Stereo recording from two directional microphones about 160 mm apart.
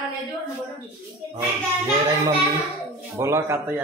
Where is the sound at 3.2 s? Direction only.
15° right (ahead or behind).